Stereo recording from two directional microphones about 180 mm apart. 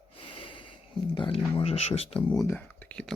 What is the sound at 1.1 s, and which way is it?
Speech, 30° left (ahead or behind).